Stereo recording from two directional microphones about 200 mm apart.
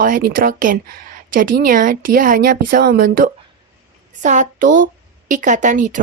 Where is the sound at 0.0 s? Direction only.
45° right (ahead or behind).